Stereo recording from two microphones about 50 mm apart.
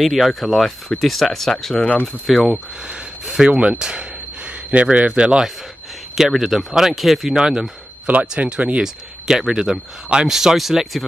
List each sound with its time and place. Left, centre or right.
0.0 s speech: centre
3.3 s speech: centre
6.1 s speech: centre
8.1 s speech: right
8.8 s speech: centre